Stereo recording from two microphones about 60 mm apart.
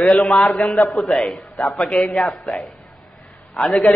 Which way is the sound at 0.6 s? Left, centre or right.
Left.